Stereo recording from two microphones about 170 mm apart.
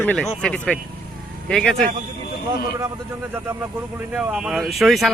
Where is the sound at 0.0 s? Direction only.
10° left (ahead or behind).